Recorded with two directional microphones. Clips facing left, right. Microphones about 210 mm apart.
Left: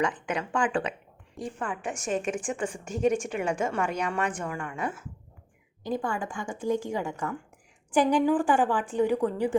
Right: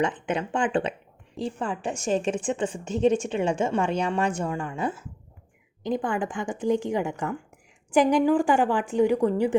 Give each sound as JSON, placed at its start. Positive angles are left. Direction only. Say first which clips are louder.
{"t": 0.0, "sound": "a woman's voice", "louder": "right 3 dB", "side_deg": -25}
{"t": 5.8, "sound": "a woman's voice", "louder": "right 4 dB", "side_deg": -15}